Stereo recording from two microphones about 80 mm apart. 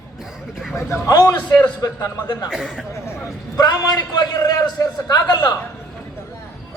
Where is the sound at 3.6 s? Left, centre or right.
Left.